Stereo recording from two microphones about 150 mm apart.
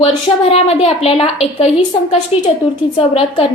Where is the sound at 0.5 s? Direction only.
40° left (ahead or behind).